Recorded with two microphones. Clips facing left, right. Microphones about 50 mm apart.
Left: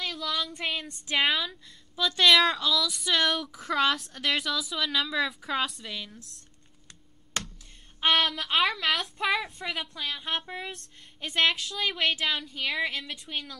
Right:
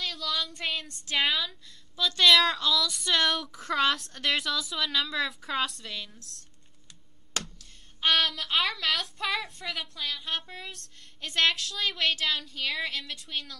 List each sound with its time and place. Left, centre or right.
0.0 s speech: centre
8.0 s a woman's voice: centre
10.0 s a sound: left
11.1 s a woman's voice: centre